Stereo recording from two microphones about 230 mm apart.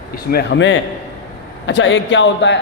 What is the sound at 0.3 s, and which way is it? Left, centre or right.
A man's voice, left.